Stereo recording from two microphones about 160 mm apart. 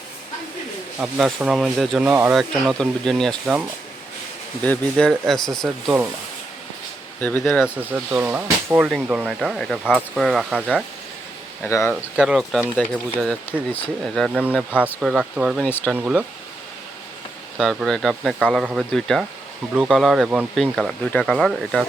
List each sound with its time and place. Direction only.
0.9 s speech: 5° right (ahead or behind)
2.3 s speech: centre (ahead or behind)
4.6 s speech: 10° left (ahead or behind)
7.2 s speech: 10° left (ahead or behind)
7.6 s speech: 10° right (ahead or behind)
11.7 s speech: 20° left (ahead or behind)
12.1 s speech: 5° right (ahead or behind)
14.3 s speech: 10° right (ahead or behind)
15.6 s speech: 5° left (ahead or behind)
16.0 s speech: 10° right (ahead or behind)
17.6 s speech: centre (ahead or behind)